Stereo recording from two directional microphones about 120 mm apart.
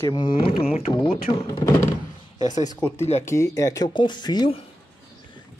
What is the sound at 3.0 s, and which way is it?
Speech, 65° left (ahead or behind).